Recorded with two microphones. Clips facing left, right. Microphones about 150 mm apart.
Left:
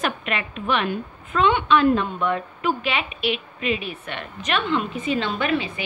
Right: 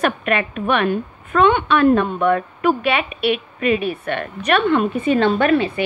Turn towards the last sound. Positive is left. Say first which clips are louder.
# right 8 dB
turn(degrees=-55)  # may be behind; listen again after turning